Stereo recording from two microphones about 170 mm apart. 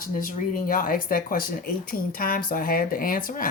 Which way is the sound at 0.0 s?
55° left (ahead or behind).